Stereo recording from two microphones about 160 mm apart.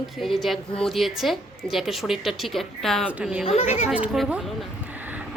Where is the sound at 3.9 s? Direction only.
5° right (ahead or behind).